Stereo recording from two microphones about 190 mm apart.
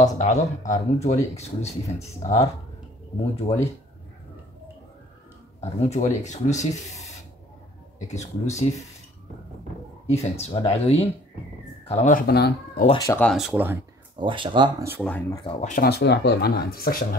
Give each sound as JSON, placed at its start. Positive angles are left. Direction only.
{"t": 0.0, "sound": "speech", "side_deg": 40}
{"t": 5.6, "sound": "speech", "side_deg": 35}
{"t": 8.1, "sound": "speech", "side_deg": 35}
{"t": 10.0, "sound": "speech", "side_deg": 35}
{"t": 12.8, "sound": "speech", "side_deg": 25}
{"t": 13.1, "sound": "speech", "side_deg": 5}
{"t": 13.4, "sound": "speech", "side_deg": -10}
{"t": 14.2, "sound": "speech", "side_deg": -25}
{"t": 15.0, "sound": "speech", "side_deg": 10}
{"t": 15.4, "sound": "speech", "side_deg": 40}
{"t": 15.8, "sound": "speech", "side_deg": 60}